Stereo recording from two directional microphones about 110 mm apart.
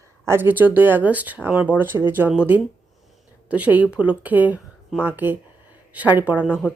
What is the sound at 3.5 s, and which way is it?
A woman's voice, 15° right (ahead or behind).